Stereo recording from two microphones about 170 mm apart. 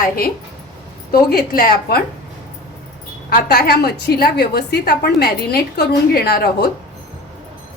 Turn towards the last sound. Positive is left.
turn(degrees=65)  # may be behind; listen again after turning